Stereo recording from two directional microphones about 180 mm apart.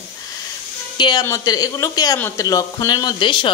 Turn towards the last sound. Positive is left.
turn(degrees=25)  # may be behind; listen again after turning